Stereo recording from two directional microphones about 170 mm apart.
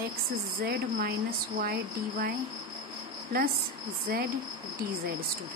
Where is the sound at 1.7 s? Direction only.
60° right (ahead or behind).